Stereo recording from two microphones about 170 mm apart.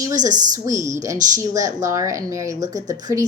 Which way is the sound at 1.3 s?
20° right (ahead or behind).